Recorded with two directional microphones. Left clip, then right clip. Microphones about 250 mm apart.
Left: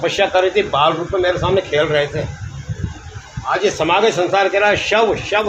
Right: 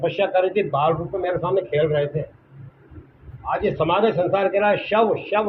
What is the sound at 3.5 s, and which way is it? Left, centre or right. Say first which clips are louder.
A man's voice: left 5 dB; centre.